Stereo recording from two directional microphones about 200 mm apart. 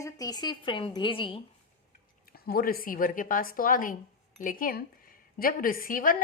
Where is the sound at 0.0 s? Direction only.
15° left (ahead or behind).